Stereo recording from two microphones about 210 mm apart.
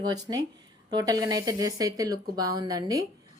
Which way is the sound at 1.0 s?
15° right (ahead or behind).